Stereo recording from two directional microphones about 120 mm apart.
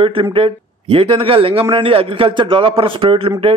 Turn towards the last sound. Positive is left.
turn(degrees=-45)  # may be behind; listen again after turning